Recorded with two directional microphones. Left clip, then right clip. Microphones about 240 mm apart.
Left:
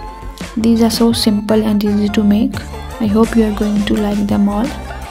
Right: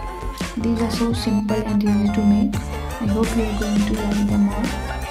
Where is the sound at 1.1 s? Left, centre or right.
Left.